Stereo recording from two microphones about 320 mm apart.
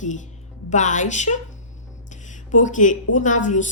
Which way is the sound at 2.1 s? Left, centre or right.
Left.